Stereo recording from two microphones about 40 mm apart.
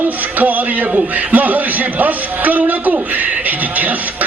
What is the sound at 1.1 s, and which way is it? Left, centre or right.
A man's voice, right.